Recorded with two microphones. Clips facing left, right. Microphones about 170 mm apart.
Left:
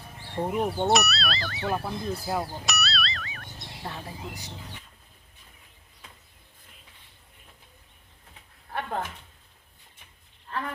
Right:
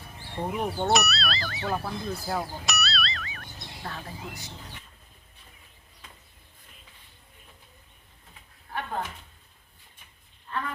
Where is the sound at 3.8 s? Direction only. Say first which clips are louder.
Left 1 dB; 15° left (ahead or behind).